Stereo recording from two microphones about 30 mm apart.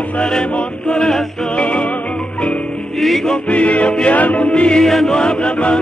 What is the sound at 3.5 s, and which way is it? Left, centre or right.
Music, left.